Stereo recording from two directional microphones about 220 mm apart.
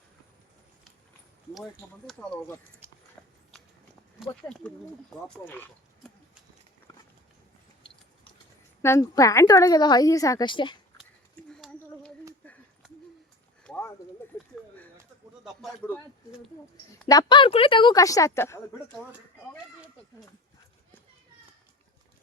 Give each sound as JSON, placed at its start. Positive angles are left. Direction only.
{"t": 2.0, "sound": "speech", "side_deg": 5}
{"t": 3.2, "sound": "horse", "side_deg": 5}
{"t": 4.2, "sound": "speech", "side_deg": 5}
{"t": 8.8, "sound": "a woman's voice", "side_deg": 15}
{"t": 11.4, "sound": "a sound", "side_deg": 5}
{"t": 13.7, "sound": "clip-clop", "side_deg": 10}
{"t": 15.4, "sound": "a man's voice", "side_deg": 0}
{"t": 17.1, "sound": "a woman's voice", "side_deg": 20}